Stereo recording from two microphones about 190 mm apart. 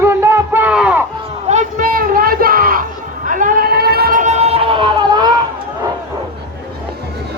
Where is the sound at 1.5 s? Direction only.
40° right (ahead or behind); by 5.3 s 20° right (ahead or behind).